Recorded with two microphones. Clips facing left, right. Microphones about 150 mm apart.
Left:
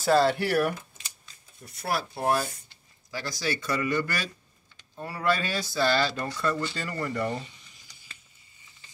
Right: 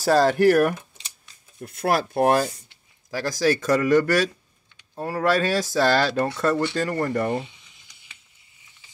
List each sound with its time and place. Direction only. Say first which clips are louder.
0.0 s speech: right 5 dB; 40° right (ahead or behind); by 2.5 s 75° right (ahead or behind)
3.1 s speech: right 10 dB; 45° right (ahead or behind)
6.5 s speech: right 8 dB; 70° right (ahead or behind)
6.9 s speech: right 6 dB; 55° right (ahead or behind)